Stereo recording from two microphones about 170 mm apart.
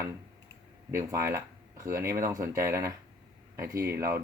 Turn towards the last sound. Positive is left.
turn(degrees=-15)  # may be behind; listen again after turning